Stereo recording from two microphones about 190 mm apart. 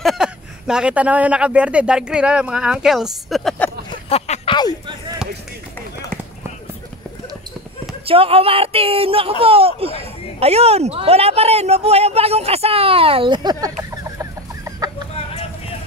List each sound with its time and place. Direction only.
0.0 s speech: centre (ahead or behind)
3.9 s a sound: 30° left (ahead or behind)
8.0 s speech: 30° right (ahead or behind)
13.8 s chicken: 15° right (ahead or behind)